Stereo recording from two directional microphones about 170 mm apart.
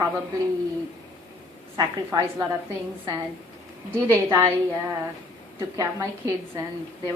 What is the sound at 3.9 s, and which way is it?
Speech, 15° right (ahead or behind).